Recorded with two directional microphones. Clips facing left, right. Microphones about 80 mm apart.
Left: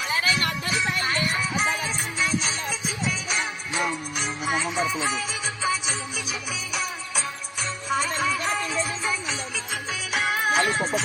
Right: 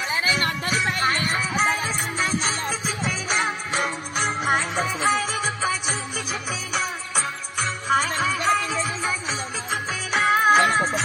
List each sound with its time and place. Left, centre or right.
0.3 s music: right
6.7 s music: right
10.1 s music: right